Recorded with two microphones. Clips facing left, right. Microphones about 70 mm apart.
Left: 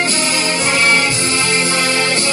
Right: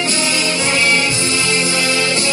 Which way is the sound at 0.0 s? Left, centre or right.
Left.